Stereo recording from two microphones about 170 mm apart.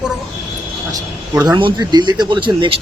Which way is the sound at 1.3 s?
25° right (ahead or behind).